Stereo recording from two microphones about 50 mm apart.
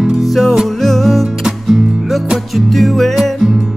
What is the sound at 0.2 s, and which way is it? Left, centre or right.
Music, centre.